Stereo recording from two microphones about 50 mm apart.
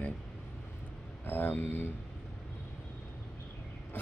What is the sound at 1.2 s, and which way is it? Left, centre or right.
Speech, left.